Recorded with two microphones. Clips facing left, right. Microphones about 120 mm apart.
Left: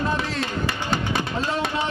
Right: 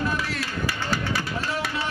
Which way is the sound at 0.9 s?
25° left (ahead or behind).